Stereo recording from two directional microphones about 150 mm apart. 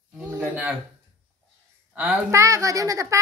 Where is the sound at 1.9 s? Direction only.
5° right (ahead or behind).